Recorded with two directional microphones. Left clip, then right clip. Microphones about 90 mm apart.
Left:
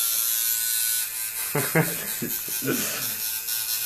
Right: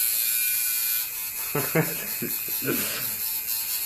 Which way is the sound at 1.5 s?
25° right (ahead or behind).